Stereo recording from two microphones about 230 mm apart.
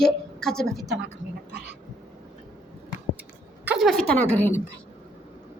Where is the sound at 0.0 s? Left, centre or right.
Centre.